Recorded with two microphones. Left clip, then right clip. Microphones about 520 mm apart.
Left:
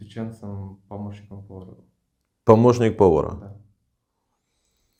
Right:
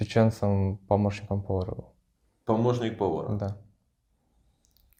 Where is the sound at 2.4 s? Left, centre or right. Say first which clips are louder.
Left 11 dB; left.